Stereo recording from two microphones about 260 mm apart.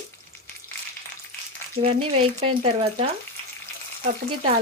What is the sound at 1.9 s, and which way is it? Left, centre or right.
Speech, right.